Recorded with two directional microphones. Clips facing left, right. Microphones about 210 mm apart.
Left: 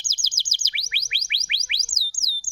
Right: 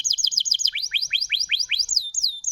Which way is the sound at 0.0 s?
10° left (ahead or behind).